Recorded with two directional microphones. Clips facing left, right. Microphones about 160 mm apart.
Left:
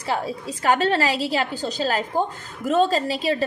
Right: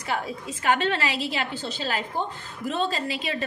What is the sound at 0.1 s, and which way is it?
A woman's voice, 35° left (ahead or behind).